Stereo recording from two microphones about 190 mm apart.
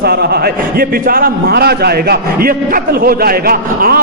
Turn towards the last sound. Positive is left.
turn(degrees=-50)  # may be behind; listen again after turning